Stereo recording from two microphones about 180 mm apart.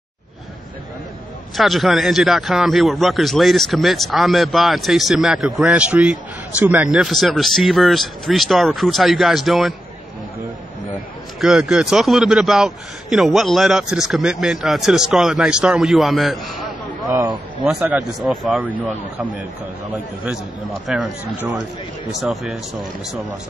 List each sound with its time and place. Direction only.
1.6 s a man's voice: centre (ahead or behind)
11.4 s a man's voice: centre (ahead or behind)
17.1 s speech: 20° right (ahead or behind)
17.6 s a man's voice: 5° right (ahead or behind)
20.8 s a man's voice: 5° right (ahead or behind)